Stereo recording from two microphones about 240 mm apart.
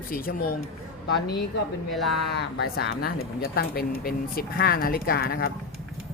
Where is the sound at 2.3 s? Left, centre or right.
Left.